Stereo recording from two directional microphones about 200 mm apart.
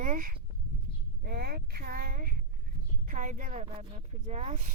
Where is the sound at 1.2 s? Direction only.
50° right (ahead or behind).